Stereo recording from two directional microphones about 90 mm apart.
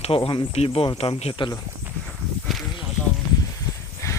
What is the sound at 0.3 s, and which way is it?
Speech, 80° left.